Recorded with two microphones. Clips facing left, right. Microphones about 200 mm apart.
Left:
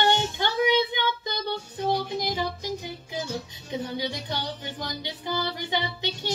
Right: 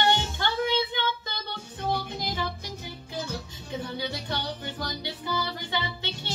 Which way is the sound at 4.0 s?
15° left (ahead or behind).